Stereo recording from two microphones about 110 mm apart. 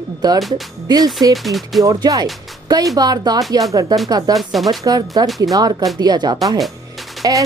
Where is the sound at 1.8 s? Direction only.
35° right (ahead or behind).